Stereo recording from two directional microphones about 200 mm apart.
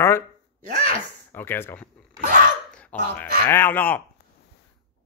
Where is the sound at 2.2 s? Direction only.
40° right (ahead or behind).